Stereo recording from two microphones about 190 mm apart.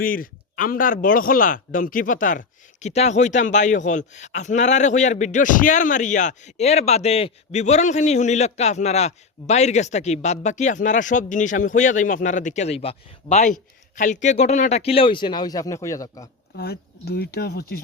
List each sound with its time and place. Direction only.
0.0 s speech: 50° left (ahead or behind); by 16.3 s 20° left (ahead or behind)
16.6 s speech: 55° left (ahead or behind)